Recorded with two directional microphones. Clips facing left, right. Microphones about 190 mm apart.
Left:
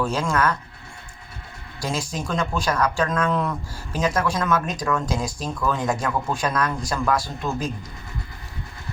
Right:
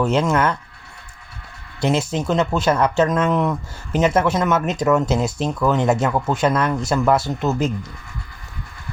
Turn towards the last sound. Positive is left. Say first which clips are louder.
# right 6 dB
turn(degrees=-25)  # may be behind; listen again after turning